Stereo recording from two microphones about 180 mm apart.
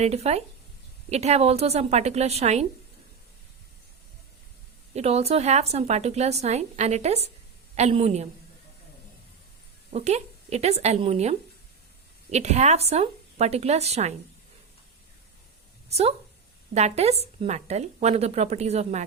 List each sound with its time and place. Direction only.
0.0 s a woman's voice: 35° right (ahead or behind)
4.9 s a woman's voice: 35° right (ahead or behind)
9.9 s a woman's voice: 35° right (ahead or behind)
15.9 s a woman's voice: 35° right (ahead or behind)